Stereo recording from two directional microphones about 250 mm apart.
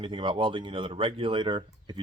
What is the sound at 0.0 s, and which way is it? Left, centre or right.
Speech, centre.